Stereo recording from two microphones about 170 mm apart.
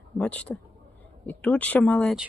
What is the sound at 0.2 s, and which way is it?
Speech, 5° left (ahead or behind).